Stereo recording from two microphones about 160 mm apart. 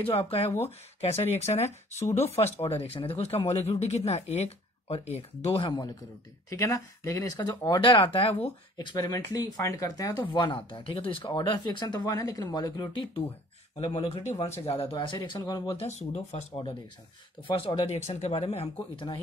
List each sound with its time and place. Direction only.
0.0 s speech: 35° left (ahead or behind)
6.5 s speech: 20° left (ahead or behind); by 8.5 s 35° left (ahead or behind)
8.7 s speech: 25° left (ahead or behind)
13.9 s speech: 40° left (ahead or behind)
15.8 s speech: 45° left (ahead or behind)
17.6 s speech: 35° left (ahead or behind)